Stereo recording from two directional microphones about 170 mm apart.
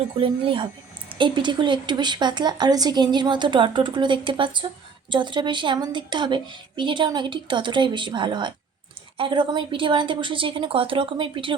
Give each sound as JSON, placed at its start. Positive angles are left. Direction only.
{"t": 0.2, "sound": "speech", "side_deg": -30}